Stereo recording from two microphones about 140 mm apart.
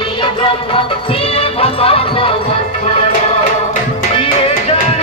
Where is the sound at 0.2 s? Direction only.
40° left (ahead or behind).